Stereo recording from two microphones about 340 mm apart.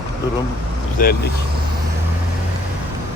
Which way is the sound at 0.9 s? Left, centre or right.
Left.